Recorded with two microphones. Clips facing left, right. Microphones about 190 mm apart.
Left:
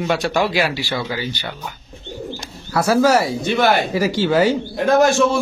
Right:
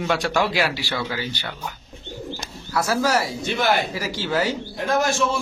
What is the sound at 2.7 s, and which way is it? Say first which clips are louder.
Speech: left 7 dB; 60° left (ahead or behind).